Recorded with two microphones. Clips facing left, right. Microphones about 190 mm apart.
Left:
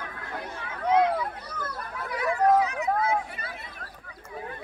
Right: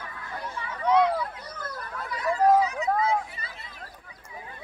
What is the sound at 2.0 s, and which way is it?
Hubbub, 60° left (ahead or behind).